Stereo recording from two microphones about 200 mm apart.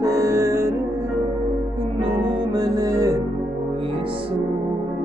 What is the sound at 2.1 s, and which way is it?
Music, 20° right (ahead or behind).